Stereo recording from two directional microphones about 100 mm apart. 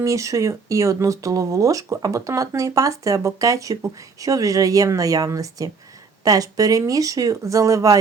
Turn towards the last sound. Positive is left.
turn(degrees=-35)  # may be behind; listen again after turning